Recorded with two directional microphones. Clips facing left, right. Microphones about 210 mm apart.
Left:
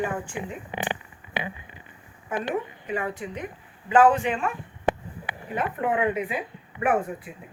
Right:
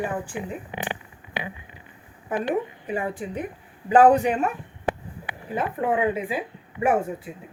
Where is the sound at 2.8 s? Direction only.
30° right (ahead or behind).